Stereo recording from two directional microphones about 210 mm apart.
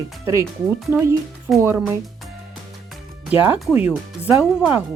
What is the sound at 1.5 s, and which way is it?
Speech, 10° right (ahead or behind).